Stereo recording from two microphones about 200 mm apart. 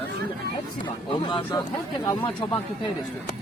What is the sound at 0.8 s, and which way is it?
Speech, 25° left (ahead or behind).